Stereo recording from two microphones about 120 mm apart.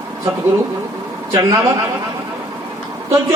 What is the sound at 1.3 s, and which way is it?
Speech, 25° right (ahead or behind).